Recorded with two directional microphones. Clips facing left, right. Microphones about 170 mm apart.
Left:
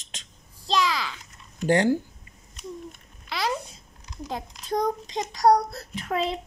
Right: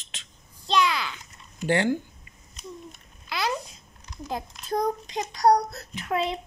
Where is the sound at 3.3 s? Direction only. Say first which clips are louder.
Left 1 dB; 30° left (ahead or behind).